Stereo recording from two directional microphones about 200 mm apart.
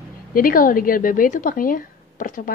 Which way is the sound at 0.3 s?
45° left (ahead or behind).